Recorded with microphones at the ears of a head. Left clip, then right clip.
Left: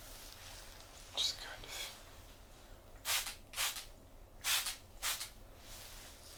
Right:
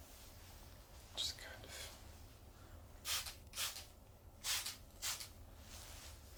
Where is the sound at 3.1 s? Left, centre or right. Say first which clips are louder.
Left 5 dB; left.